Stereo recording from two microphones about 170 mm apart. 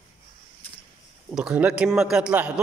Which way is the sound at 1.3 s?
5° right (ahead or behind).